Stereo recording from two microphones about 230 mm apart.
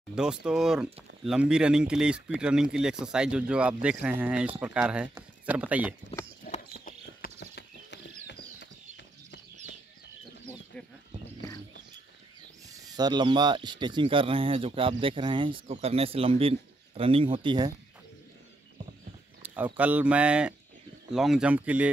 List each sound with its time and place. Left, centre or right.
0.1 s speech: centre
6.4 s clip-clop: left
8.3 s clip-clop: left
12.7 s speech: centre
19.4 s speech: centre